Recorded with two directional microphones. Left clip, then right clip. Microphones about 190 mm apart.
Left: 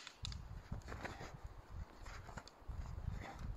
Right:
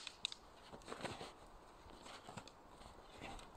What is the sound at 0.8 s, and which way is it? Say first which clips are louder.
Horse: right 1 dB; 35° left (ahead or behind).